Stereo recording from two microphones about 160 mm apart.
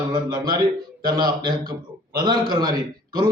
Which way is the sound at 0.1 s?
25° right (ahead or behind).